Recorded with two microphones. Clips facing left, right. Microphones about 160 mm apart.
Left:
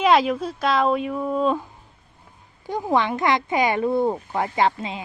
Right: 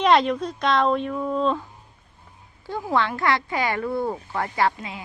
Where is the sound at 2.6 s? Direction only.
15° left (ahead or behind).